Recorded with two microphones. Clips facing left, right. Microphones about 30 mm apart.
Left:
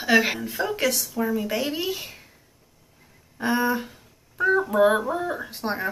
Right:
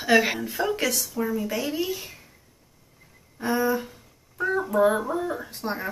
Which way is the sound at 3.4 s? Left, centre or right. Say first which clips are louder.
Left 1 dB; left.